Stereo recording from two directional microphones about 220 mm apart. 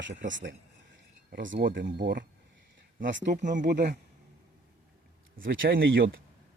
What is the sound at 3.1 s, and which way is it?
Speech, 50° right (ahead or behind).